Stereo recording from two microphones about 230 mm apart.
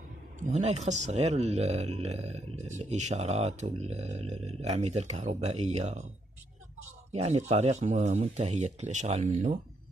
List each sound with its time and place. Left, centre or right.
0.4 s speech: right
7.1 s speech: right